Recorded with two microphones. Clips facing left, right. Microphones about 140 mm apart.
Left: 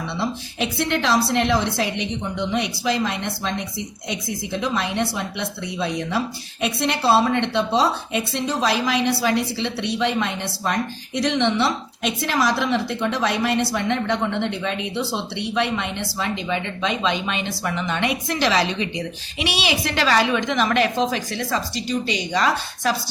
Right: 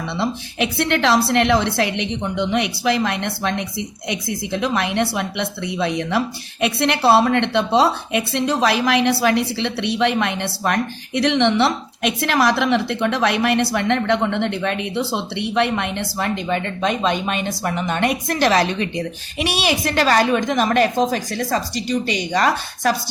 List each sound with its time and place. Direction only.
0.2 s a woman's voice: 65° right (ahead or behind); by 23.0 s 50° right (ahead or behind)